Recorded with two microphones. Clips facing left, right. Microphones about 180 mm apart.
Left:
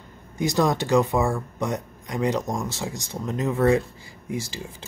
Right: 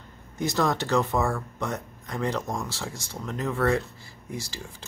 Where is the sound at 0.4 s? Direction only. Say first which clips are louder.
Left 3 dB; 15° left (ahead or behind).